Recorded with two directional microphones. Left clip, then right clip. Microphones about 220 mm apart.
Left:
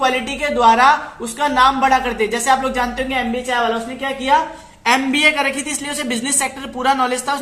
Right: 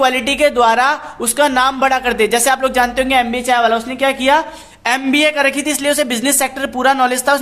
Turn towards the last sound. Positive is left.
turn(degrees=-40)  # may be behind; listen again after turning